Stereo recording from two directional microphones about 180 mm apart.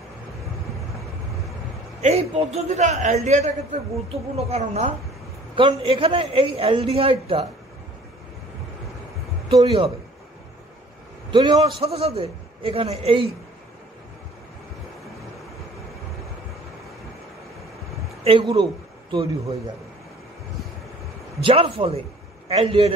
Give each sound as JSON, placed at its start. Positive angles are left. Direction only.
{"t": 2.0, "sound": "a man's voice", "side_deg": -35}
{"t": 9.5, "sound": "a man's voice", "side_deg": -35}
{"t": 11.2, "sound": "a man's voice", "side_deg": -25}
{"t": 18.2, "sound": "a man's voice", "side_deg": -30}
{"t": 21.4, "sound": "a man's voice", "side_deg": -30}